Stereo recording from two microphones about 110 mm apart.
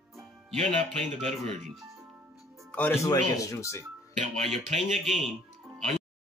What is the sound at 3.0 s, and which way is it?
Speech, 30° left (ahead or behind).